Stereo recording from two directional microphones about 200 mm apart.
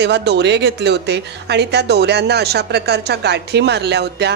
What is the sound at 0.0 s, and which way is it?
Speech, 55° right (ahead or behind).